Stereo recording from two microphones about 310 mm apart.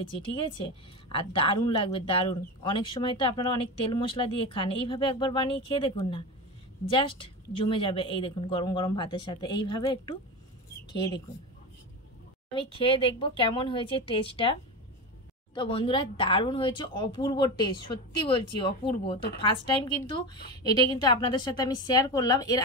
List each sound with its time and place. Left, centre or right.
0.3 s a woman's voice: centre
12.5 s a woman's voice: centre